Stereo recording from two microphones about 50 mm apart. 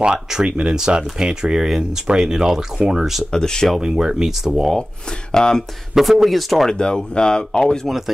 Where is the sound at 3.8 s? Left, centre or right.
Centre.